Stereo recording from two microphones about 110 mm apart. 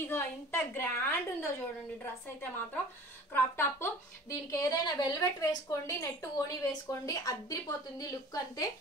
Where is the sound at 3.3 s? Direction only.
20° left (ahead or behind).